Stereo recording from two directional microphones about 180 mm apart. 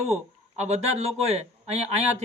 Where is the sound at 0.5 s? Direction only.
40° right (ahead or behind).